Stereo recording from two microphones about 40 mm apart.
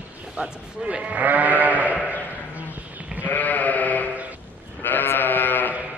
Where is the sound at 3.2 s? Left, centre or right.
Left.